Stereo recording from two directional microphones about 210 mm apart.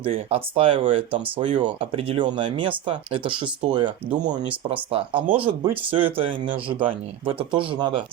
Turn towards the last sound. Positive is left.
turn(degrees=-25)  # may be behind; listen again after turning